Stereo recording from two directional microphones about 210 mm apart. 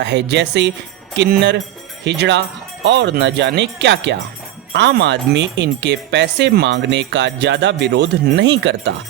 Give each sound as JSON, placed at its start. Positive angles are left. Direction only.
{"t": 0.0, "sound": "speech", "side_deg": -55}